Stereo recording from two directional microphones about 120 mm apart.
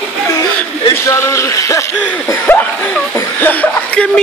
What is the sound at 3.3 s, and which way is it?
Cough, 15° left (ahead or behind).